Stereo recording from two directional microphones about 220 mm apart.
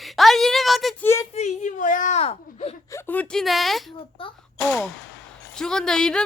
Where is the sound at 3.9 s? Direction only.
25° left (ahead or behind).